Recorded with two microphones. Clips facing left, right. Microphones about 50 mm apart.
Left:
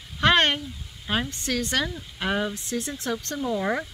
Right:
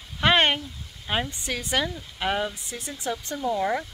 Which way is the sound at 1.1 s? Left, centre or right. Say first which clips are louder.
Left 1 dB; centre.